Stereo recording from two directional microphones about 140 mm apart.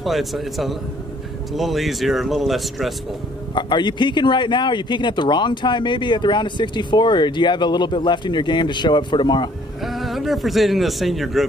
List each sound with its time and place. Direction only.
0.0 s speech: centre (ahead or behind)
3.5 s speech: 35° left (ahead or behind)
9.8 s a man's voice: centre (ahead or behind)